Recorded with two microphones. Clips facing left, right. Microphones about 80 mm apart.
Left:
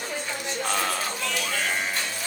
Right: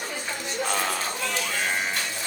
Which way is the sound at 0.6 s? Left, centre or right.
Centre.